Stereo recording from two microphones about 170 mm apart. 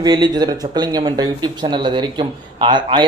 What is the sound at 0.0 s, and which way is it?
Speech, 25° right (ahead or behind).